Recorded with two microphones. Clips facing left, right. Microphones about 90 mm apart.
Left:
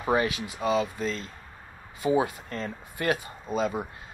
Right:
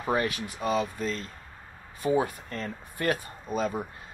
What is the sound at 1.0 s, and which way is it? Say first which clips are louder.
Speech: left 1 dB; 90° left.